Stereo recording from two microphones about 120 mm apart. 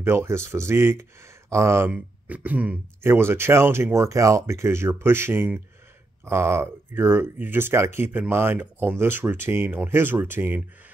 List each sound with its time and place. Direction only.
0.0 s speech: 20° right (ahead or behind)